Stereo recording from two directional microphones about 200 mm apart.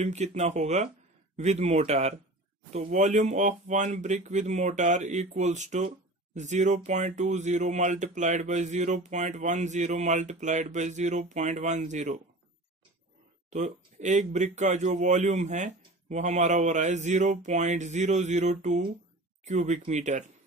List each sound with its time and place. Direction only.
0.0 s speech: 35° right (ahead or behind)
13.5 s speech: 35° right (ahead or behind)